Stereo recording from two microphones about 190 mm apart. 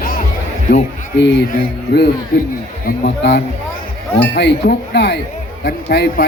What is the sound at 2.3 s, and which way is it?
Speech, 50° left (ahead or behind).